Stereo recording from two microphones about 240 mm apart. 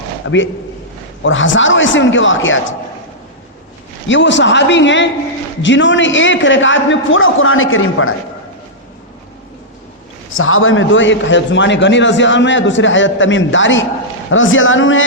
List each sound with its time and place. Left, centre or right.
0.2 s a man's voice: left
4.1 s a man's voice: left
10.3 s a man's voice: left